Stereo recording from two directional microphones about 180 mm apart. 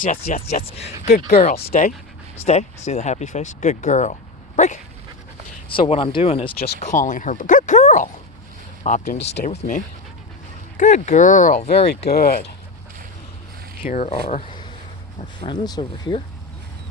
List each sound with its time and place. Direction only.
0.0 s speech: 40° left (ahead or behind)
2.5 s speech: 35° left (ahead or behind)
5.6 s speech: 30° left (ahead or behind)
6.7 s speech: 45° left (ahead or behind)
9.1 s speech: 70° left (ahead or behind)
9.5 s speech: 40° left (ahead or behind)
10.8 s speech: 45° left (ahead or behind)
11.9 s speech: 65° left (ahead or behind)
13.8 s speech: 40° left (ahead or behind)
15.2 s speech: 25° left (ahead or behind)